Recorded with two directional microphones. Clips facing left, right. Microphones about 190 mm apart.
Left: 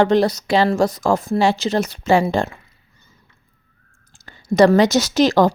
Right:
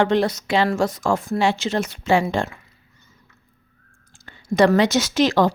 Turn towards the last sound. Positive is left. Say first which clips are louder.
# left 3 dB
turn(degrees=40)  # may be behind; listen again after turning